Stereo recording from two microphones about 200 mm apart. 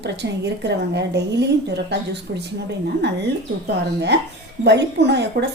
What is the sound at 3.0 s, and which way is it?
Speech, 55° right (ahead or behind).